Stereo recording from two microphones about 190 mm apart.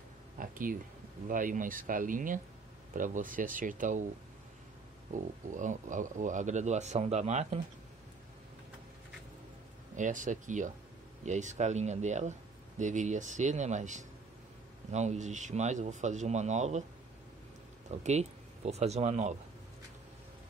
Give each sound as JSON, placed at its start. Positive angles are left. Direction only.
{"t": 0.4, "sound": "speech", "side_deg": -45}
{"t": 5.1, "sound": "speech", "side_deg": -40}
{"t": 9.9, "sound": "speech", "side_deg": -40}
{"t": 18.0, "sound": "speech", "side_deg": -35}